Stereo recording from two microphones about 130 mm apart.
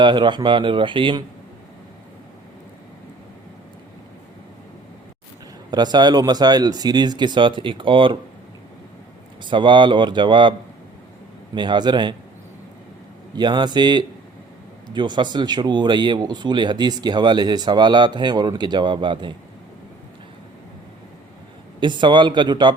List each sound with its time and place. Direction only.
0.0 s speech: 35° right (ahead or behind)
5.7 s speech: 35° right (ahead or behind)
9.4 s speech: 35° right (ahead or behind)
11.5 s speech: 35° right (ahead or behind)
13.3 s speech: 35° right (ahead or behind)
21.8 s speech: 35° right (ahead or behind)